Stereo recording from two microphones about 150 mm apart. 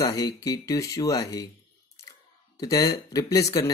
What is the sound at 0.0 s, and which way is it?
Speech, 25° left (ahead or behind).